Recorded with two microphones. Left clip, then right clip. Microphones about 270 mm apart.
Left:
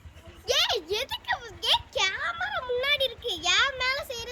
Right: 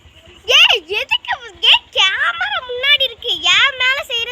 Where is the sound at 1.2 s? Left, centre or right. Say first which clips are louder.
Right 8 dB; centre.